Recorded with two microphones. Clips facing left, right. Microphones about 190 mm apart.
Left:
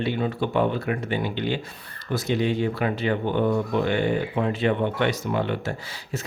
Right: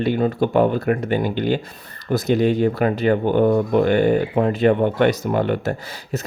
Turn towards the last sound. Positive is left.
turn(degrees=-45)  # may be behind; listen again after turning